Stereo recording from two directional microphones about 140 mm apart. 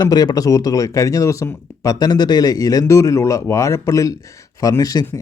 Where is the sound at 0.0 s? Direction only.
30° left (ahead or behind).